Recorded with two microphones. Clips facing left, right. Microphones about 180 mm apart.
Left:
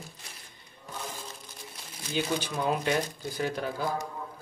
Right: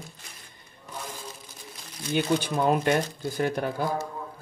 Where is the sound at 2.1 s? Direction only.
50° right (ahead or behind).